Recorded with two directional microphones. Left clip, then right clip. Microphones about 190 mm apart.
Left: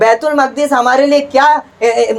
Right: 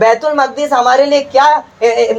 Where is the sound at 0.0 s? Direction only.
35° left (ahead or behind).